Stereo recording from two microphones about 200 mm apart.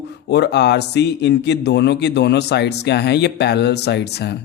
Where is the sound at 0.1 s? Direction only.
55° left (ahead or behind).